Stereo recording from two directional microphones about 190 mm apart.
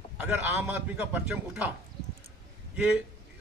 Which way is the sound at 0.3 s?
10° right (ahead or behind).